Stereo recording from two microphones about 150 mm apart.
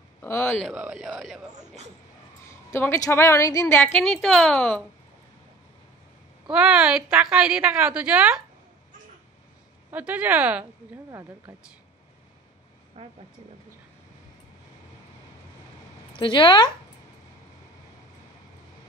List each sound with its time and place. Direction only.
0.2 s a woman's voice: 15° left (ahead or behind)
0.7 s a woman's voice: 5° right (ahead or behind)
2.7 s a woman's voice: 15° left (ahead or behind)
6.5 s a woman's voice: 5° right (ahead or behind)
9.8 s speech: 10° right (ahead or behind)
10.6 s speech: 25° right (ahead or behind)
13.0 s speech: 40° right (ahead or behind)
16.1 s speech: 35° left (ahead or behind)